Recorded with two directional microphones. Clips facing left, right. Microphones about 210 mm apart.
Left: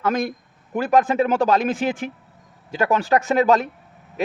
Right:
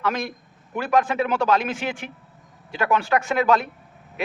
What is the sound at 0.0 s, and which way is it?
A man's voice, 45° left (ahead or behind).